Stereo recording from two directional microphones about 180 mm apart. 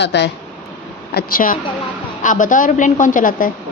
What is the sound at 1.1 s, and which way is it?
A woman's voice, 50° left (ahead or behind).